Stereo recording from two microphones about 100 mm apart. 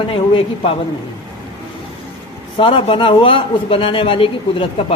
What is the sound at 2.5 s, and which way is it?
A man's voice, 70° left (ahead or behind).